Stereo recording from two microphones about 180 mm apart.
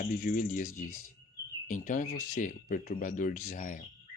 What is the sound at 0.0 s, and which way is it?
Speech, 50° left (ahead or behind).